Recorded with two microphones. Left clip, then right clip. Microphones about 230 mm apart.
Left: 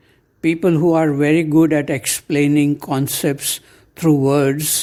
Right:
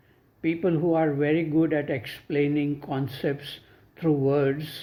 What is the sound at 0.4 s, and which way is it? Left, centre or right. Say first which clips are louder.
Speech: left 9 dB; left.